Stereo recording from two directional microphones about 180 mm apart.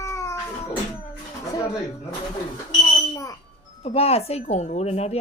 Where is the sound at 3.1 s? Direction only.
20° left (ahead or behind).